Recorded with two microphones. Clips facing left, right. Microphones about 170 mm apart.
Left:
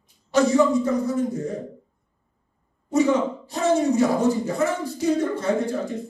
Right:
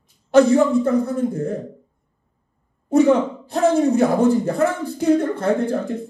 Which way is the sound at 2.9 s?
60° right (ahead or behind).